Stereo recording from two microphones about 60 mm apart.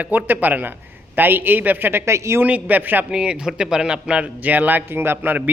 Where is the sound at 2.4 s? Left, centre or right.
Right.